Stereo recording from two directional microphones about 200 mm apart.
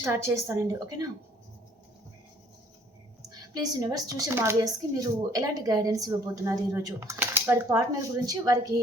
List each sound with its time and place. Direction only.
0.0 s a woman's voice: 15° right (ahead or behind)
3.5 s a woman's voice: 15° right (ahead or behind)